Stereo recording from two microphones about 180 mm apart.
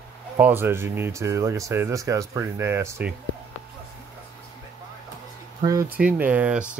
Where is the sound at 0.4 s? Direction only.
10° right (ahead or behind).